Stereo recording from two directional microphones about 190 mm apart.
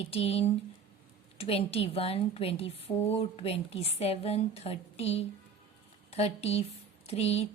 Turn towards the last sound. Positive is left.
turn(degrees=35)  # may be behind; listen again after turning